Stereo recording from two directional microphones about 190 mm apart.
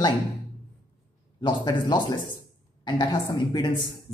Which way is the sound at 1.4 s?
25° left (ahead or behind).